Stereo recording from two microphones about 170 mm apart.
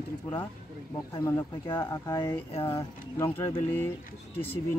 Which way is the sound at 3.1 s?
20° left (ahead or behind).